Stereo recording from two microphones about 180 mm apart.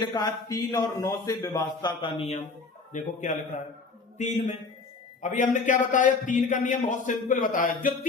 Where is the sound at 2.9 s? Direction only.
45° left (ahead or behind).